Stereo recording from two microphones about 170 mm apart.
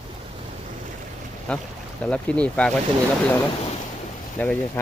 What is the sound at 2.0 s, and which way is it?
Speech, 5° left (ahead or behind).